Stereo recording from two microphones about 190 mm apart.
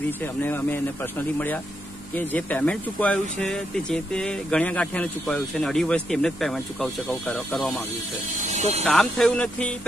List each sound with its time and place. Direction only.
0.2 s speech: 10° left (ahead or behind)
8.5 s speech: 35° right (ahead or behind)
8.8 s speech: 5° left (ahead or behind)